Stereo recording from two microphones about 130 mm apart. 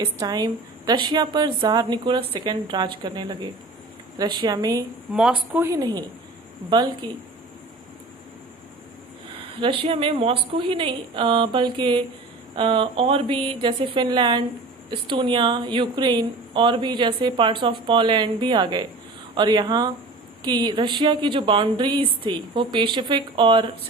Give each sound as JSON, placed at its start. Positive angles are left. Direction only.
{"t": 0.0, "sound": "a woman's voice", "side_deg": -30}
{"t": 5.1, "sound": "speech", "side_deg": -5}
{"t": 5.5, "sound": "a woman's voice", "side_deg": -20}
{"t": 9.6, "sound": "a woman's voice", "side_deg": -45}